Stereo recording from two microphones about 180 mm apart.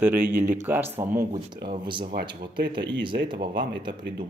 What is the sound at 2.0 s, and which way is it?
Speech, 55° right (ahead or behind).